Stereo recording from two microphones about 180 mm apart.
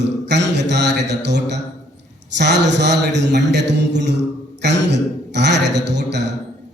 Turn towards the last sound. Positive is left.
turn(degrees=-70)  # may be behind; listen again after turning